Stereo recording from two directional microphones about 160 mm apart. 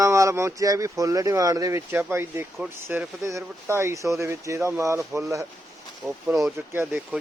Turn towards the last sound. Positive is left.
turn(degrees=-15)  # may be behind; listen again after turning